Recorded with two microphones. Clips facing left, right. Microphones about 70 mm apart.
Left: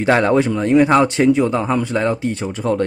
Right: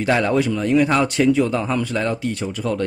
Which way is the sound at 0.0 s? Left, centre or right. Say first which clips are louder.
Left 4 dB; left.